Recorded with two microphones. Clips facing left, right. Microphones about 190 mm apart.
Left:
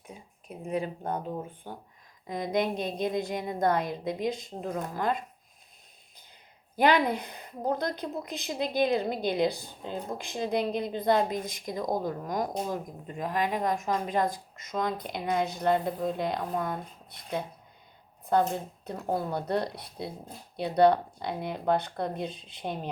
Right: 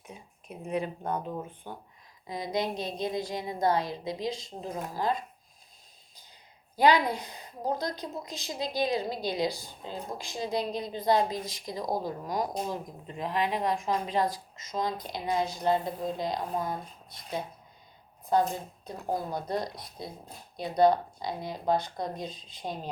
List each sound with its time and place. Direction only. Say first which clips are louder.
0.4 s a sound: even; 35° left (ahead or behind)
2.2 s a woman's voice: left 3 dB; 50° left (ahead or behind)
6.7 s a woman's voice: even; 55° left (ahead or behind)